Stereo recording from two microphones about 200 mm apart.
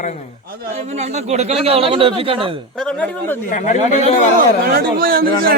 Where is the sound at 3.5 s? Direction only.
40° left (ahead or behind).